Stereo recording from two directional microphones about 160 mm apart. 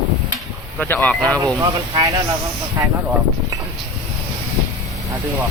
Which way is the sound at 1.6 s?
25° right (ahead or behind).